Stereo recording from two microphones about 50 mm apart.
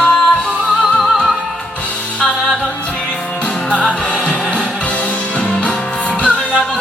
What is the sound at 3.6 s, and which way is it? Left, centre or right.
Music, left.